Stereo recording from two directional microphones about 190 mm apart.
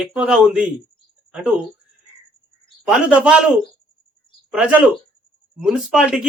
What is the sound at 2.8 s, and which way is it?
Speech, 5° right (ahead or behind).